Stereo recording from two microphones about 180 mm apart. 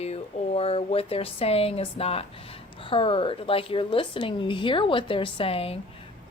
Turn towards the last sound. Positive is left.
turn(degrees=30)  # may be behind; listen again after turning